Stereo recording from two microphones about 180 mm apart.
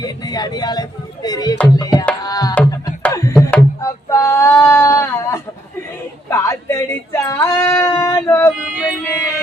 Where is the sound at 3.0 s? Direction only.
15° left (ahead or behind).